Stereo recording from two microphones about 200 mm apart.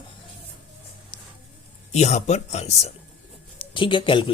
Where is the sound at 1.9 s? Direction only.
35° left (ahead or behind).